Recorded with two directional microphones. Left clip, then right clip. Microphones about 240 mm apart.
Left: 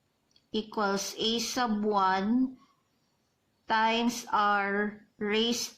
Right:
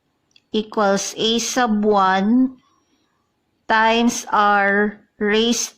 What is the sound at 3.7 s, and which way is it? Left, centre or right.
Speech, right.